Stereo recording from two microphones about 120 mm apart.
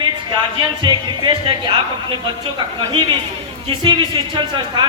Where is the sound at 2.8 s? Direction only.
40° right (ahead or behind).